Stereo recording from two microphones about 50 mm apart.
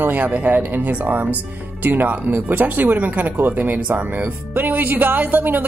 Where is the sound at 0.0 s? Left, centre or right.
Right.